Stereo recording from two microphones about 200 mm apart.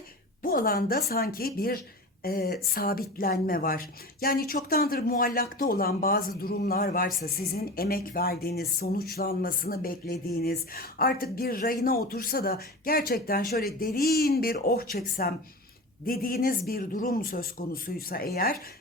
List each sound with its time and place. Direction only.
0.4 s speech: 45° left (ahead or behind)